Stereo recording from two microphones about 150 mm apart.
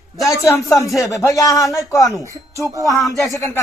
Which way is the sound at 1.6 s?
Centre (ahead or behind).